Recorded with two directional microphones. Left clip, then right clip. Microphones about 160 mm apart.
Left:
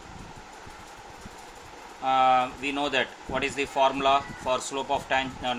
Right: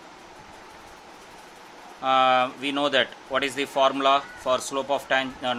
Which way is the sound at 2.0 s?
30° right (ahead or behind).